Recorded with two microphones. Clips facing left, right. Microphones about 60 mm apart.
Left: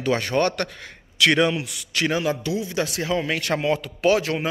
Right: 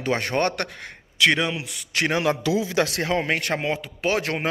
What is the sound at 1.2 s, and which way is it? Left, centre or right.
Speech, centre.